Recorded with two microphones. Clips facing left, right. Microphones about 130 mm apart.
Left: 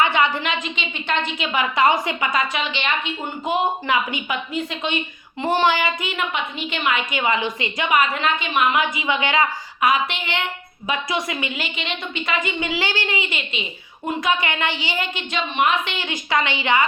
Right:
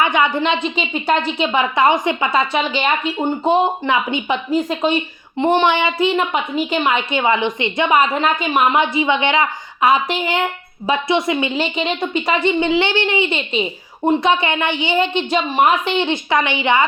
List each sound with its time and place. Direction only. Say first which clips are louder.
0.0 s a woman's voice: right 3 dB; 20° right (ahead or behind)
4.4 s a woman's voice: right 8 dB; 40° right (ahead or behind)
5.4 s a woman's voice: right 4 dB; 20° right (ahead or behind)